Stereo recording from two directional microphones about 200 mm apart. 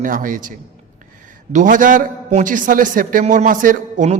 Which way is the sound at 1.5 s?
40° right (ahead or behind).